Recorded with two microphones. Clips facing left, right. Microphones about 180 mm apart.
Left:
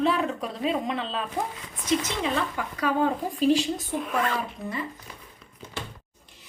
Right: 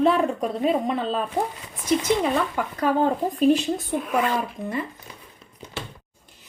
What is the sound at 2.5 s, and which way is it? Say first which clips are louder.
Speech: right 4 dB; 45° right (ahead or behind).